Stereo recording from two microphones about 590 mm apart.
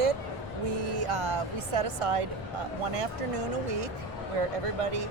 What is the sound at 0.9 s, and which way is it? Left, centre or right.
Speech, right.